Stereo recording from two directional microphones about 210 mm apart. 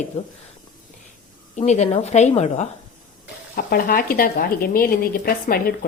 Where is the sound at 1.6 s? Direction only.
35° left (ahead or behind).